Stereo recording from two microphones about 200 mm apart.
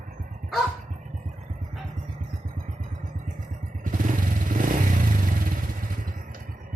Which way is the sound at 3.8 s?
40° right (ahead or behind).